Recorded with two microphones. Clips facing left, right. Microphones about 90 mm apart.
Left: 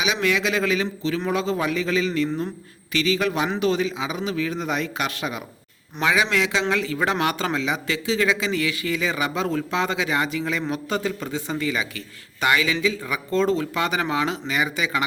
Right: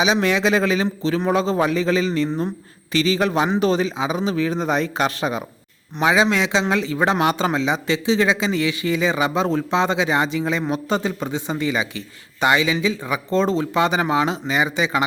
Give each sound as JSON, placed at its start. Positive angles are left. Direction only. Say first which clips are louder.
{"t": 0.0, "sound": "a man's voice", "louder": "right 4 dB", "side_deg": -30}